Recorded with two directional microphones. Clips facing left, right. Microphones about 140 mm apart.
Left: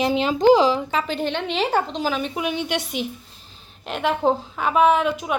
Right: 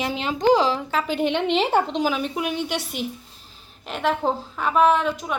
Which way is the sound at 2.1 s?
5° right (ahead or behind).